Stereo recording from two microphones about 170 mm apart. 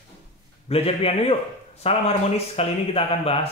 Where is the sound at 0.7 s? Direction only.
35° left (ahead or behind).